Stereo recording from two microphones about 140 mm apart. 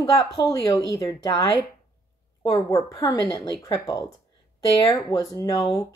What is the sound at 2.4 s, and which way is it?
Speech, 25° left (ahead or behind).